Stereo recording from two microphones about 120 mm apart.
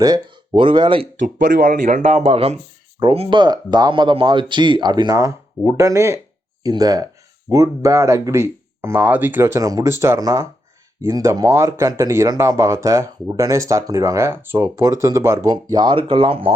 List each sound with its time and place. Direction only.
0.0 s speech: 40° right (ahead or behind)
1.2 s speech: 90° right
2.3 s speech: 55° right (ahead or behind); by 15.4 s 25° right (ahead or behind)
15.4 s speech: 35° right (ahead or behind)